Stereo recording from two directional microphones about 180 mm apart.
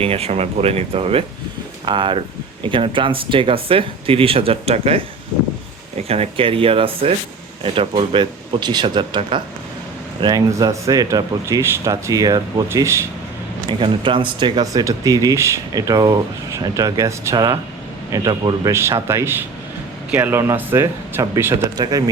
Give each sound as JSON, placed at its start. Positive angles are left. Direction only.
{"t": 0.0, "sound": "a man's voice", "side_deg": -35}
{"t": 6.1, "sound": "a man's voice", "side_deg": -30}
{"t": 13.7, "sound": "a man's voice", "side_deg": -25}